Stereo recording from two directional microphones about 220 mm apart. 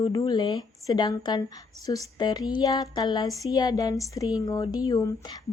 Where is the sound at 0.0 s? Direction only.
20° left (ahead or behind).